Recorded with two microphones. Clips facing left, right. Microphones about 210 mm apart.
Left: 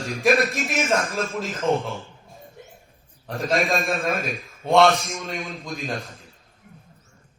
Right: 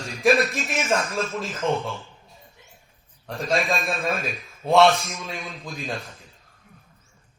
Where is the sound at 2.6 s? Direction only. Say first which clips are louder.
Left 10 dB; 50° left (ahead or behind).